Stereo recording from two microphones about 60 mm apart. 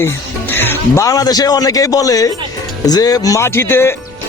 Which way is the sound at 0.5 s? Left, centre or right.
Left.